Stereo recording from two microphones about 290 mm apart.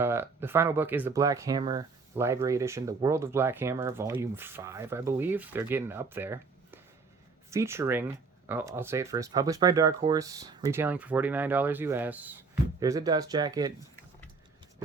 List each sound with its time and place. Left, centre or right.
0.0 s speech: centre